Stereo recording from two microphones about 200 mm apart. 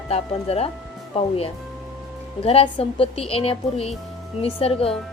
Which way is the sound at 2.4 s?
30° left (ahead or behind).